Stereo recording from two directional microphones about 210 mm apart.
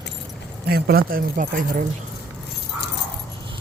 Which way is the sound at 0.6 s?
45° right (ahead or behind).